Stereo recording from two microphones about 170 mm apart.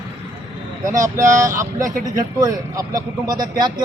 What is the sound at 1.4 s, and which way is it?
A man's voice, 20° right (ahead or behind).